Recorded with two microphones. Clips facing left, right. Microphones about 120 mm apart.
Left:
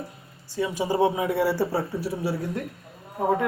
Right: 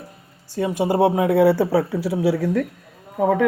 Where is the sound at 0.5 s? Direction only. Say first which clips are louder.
Right 5 dB; 50° right (ahead or behind).